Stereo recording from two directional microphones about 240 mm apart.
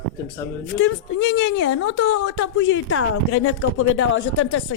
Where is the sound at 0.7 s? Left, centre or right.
Left.